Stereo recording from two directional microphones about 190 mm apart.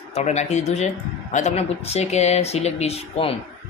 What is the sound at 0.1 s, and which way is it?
Speech, 35° left (ahead or behind).